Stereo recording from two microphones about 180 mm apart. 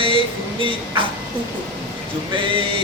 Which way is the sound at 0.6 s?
30° right (ahead or behind).